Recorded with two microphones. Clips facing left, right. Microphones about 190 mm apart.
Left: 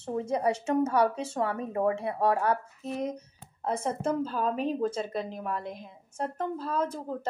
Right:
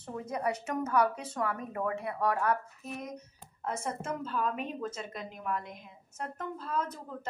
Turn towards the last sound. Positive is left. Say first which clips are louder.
# left 5 dB
turn(degrees=30)  # may be behind; listen again after turning